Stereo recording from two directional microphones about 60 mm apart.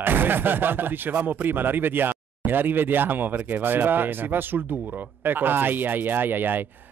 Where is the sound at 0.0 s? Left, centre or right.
Right.